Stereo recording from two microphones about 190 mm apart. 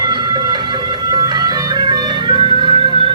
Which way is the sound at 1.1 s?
20° right (ahead or behind).